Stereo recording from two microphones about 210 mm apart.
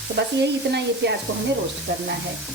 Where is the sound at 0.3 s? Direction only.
55° right (ahead or behind).